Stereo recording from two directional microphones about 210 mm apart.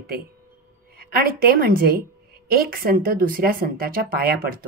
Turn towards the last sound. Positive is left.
turn(degrees=-45)  # may be behind; listen again after turning